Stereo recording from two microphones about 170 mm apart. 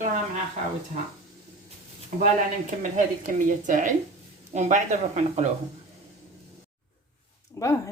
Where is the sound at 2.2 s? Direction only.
50° right (ahead or behind).